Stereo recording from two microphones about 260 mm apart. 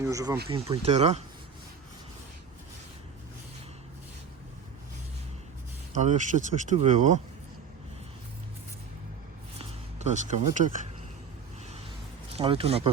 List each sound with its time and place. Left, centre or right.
0.0 s speech: centre
5.9 s speech: right
9.6 s a sound: right
12.3 s speech: right